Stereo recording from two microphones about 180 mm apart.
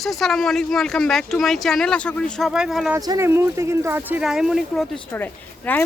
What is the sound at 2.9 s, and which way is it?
Speech, 15° right (ahead or behind).